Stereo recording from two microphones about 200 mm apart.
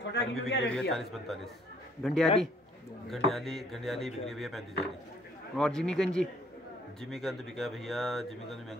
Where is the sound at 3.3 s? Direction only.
Centre (ahead or behind).